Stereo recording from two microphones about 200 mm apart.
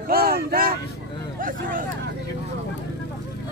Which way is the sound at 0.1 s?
50° right (ahead or behind).